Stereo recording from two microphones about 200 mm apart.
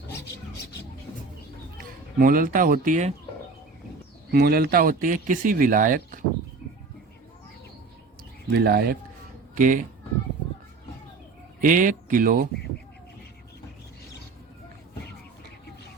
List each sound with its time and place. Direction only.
0.1 s rub: 55° left (ahead or behind)
1.8 s speech: 45° right (ahead or behind)
4.3 s speech: 50° right (ahead or behind)
8.5 s speech: 50° right (ahead or behind)
11.6 s speech: 40° right (ahead or behind)